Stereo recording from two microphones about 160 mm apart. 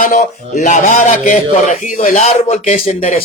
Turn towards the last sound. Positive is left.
turn(degrees=40)  # may be behind; listen again after turning